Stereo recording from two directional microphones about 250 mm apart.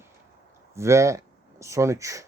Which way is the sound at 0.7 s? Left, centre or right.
Centre.